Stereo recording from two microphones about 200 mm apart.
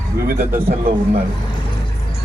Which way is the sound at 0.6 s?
50° right (ahead or behind).